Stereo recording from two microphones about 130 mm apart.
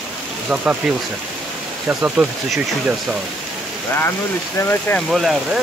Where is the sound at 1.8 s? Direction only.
10° right (ahead or behind).